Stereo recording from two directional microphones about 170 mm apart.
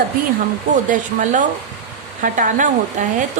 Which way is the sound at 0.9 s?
45° right (ahead or behind).